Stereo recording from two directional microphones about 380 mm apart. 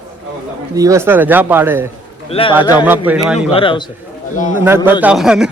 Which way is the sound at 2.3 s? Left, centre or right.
Centre.